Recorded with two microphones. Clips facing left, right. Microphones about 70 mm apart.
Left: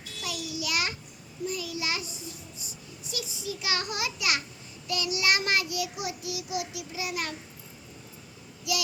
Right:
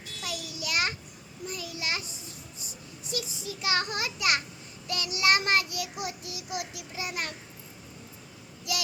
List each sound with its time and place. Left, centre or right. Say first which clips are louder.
0.3 s a sound: left 2 dB; right
1.5 s a child's voice: left 2 dB; right
8.7 s child singing: left 3 dB; right